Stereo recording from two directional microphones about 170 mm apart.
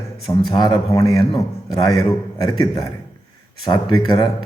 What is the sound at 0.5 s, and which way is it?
Speech, 30° left (ahead or behind).